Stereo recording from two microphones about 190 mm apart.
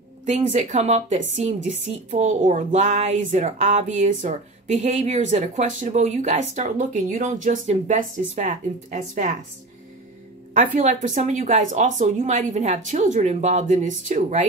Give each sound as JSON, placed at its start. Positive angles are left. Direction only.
{"t": 0.2, "sound": "a woman's voice", "side_deg": -40}
{"t": 10.5, "sound": "a woman's voice", "side_deg": -40}